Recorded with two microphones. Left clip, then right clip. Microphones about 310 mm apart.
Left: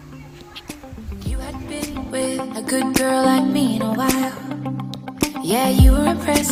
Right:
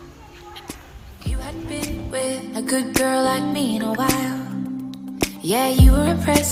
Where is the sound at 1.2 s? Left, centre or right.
Centre.